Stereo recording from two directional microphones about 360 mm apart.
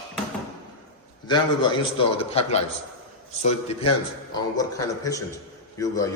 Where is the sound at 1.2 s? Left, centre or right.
Centre.